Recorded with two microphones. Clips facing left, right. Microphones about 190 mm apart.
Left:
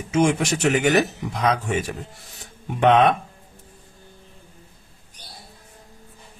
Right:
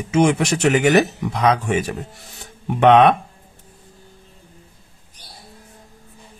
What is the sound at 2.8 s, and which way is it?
Speech, 65° right (ahead or behind).